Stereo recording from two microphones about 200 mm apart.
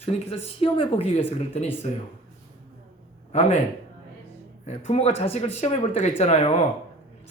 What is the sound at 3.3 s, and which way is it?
Speech, 35° left (ahead or behind).